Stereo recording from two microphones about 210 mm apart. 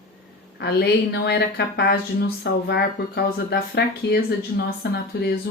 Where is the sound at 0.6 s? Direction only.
50° left (ahead or behind).